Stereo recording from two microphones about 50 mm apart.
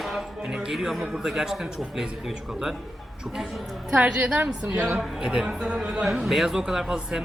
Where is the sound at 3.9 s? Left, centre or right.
Right.